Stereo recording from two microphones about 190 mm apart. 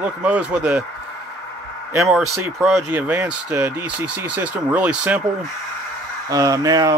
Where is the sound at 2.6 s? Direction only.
Centre (ahead or behind).